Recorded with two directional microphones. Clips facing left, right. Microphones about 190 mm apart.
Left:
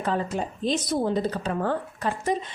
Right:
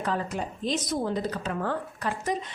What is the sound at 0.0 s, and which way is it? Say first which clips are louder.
A woman's voice: left 3 dB; 25° left (ahead or behind).